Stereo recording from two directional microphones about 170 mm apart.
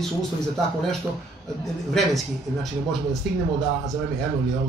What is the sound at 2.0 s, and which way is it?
Speech, 5° left (ahead or behind).